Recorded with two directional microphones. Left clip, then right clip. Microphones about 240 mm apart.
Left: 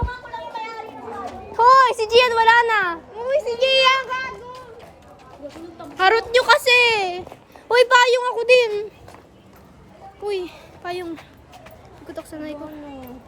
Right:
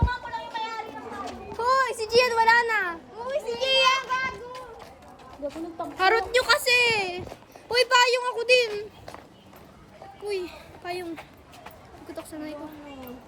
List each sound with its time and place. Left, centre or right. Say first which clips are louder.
1.5 s a sound: left 11 dB; centre
2.0 s speech: left 6 dB; right
2.4 s a woman's voice: left 6 dB; centre
3.2 s a sound: left 7 dB; left
5.4 s speech: right 3 dB; right
6.0 s a woman's voice: left 5 dB; centre
10.2 s speech: left 5 dB; centre
12.3 s a woman's voice: left 5 dB; centre